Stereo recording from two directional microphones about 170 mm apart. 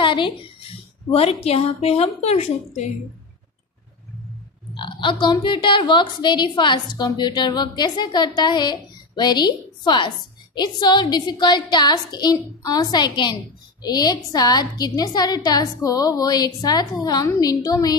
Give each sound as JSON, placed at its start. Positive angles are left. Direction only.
{"t": 0.0, "sound": "a woman's voice", "side_deg": 30}
{"t": 4.7, "sound": "a woman's voice", "side_deg": 30}